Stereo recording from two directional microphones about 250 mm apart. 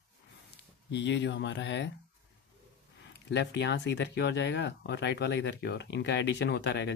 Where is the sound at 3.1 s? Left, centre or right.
Left.